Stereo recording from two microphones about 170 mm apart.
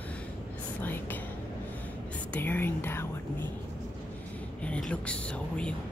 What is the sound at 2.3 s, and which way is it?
Speech, 10° left (ahead or behind).